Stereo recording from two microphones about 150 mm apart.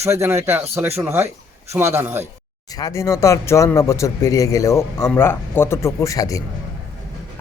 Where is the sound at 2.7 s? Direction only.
20° left (ahead or behind).